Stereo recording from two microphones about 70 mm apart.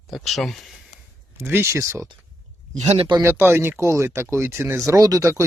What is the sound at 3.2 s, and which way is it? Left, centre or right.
Speech, right.